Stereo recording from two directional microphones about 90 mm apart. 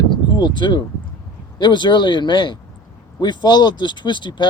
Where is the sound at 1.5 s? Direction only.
55° left (ahead or behind).